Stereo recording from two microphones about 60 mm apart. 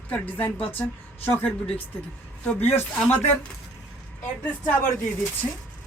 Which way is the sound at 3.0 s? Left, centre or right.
Left.